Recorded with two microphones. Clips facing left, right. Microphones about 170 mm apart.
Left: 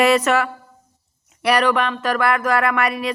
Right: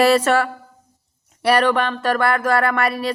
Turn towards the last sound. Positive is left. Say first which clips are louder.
# even
turn(degrees=-35)  # may be behind; listen again after turning